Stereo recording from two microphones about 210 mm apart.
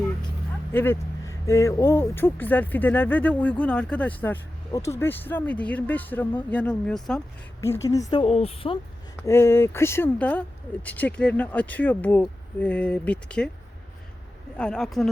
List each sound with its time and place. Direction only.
0.7 s speech: 10° left (ahead or behind)
7.6 s a woman's voice: 15° left (ahead or behind)
9.2 s speech: 10° left (ahead or behind)
14.6 s speech: 5° left (ahead or behind)